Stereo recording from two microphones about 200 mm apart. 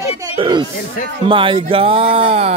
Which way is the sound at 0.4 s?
25° right (ahead or behind).